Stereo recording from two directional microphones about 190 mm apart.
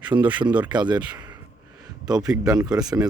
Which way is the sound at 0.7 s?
25° right (ahead or behind).